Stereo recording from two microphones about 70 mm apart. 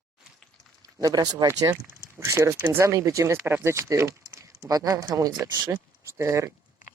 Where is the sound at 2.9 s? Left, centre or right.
Right.